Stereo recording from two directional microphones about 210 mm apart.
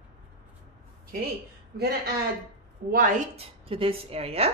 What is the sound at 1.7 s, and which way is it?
A man's voice, 50° right (ahead or behind).